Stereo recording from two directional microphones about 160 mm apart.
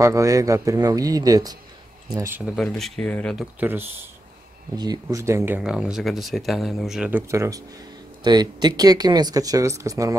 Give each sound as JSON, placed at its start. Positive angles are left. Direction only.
{"t": 0.0, "sound": "speech", "side_deg": -20}
{"t": 2.5, "sound": "speech", "side_deg": 0}
{"t": 3.5, "sound": "speech", "side_deg": -15}
{"t": 5.6, "sound": "speech", "side_deg": -5}